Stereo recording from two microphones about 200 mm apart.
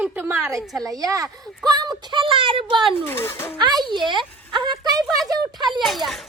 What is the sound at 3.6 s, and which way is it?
Speech, 20° right (ahead or behind).